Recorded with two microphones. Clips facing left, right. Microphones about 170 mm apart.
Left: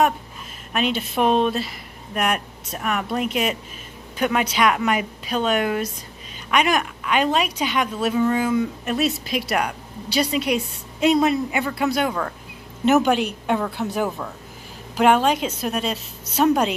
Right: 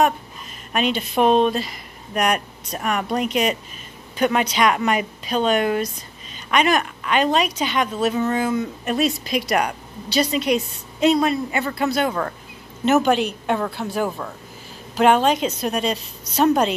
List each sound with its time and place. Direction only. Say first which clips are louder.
0.7 s speech: right 2 dB; centre (ahead or behind)
11.1 s a man's voice: left 1 dB; 20° left (ahead or behind)
14.0 s speech: right 1 dB; centre (ahead or behind)